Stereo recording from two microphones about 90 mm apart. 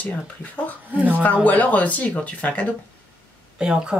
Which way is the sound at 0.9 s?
15° right (ahead or behind).